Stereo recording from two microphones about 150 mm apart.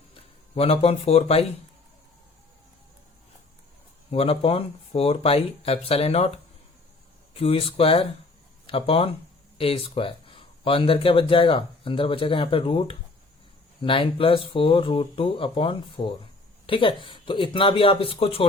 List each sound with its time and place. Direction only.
0.1 s speech: 40° left (ahead or behind)
4.1 s speech: 40° left (ahead or behind)